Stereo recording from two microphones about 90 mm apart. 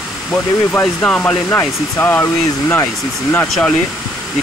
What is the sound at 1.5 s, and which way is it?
Speech, 25° left (ahead or behind).